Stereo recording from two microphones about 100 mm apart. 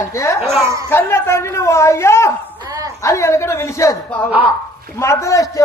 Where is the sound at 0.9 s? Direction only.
25° left (ahead or behind).